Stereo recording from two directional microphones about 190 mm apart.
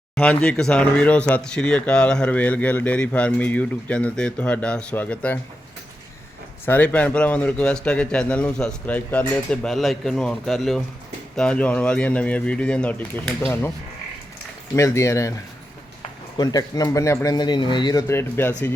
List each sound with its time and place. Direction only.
0.2 s speech: 5° left (ahead or behind)
6.7 s a man's voice: 10° left (ahead or behind)
14.8 s speech: 15° left (ahead or behind)
16.4 s speech: 20° left (ahead or behind)